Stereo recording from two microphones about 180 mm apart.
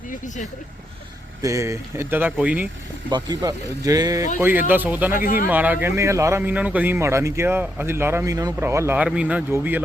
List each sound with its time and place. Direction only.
1.4 s speech: 20° right (ahead or behind)
3.1 s speech: 25° right (ahead or behind)
5.2 s speech: 50° left (ahead or behind)
5.5 s speech: 10° right (ahead or behind)